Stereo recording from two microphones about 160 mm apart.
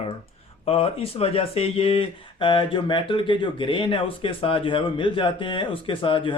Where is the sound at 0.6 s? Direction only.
35° left (ahead or behind).